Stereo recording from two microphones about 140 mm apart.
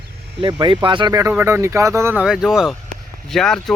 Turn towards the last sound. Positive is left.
turn(degrees=5)  # may be behind; listen again after turning